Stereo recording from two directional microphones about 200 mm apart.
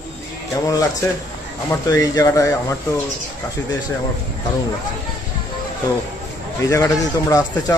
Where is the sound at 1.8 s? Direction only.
20° left (ahead or behind).